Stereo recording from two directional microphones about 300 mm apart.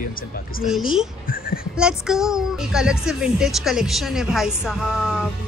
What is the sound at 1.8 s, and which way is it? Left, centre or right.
Speech, centre.